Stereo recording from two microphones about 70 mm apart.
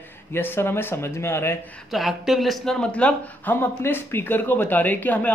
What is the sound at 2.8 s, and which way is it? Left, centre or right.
Speech, centre.